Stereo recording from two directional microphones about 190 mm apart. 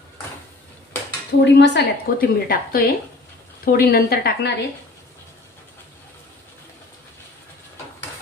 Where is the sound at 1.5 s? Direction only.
60° left (ahead or behind).